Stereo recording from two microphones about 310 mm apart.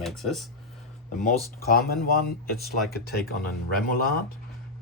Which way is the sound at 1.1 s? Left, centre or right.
Left.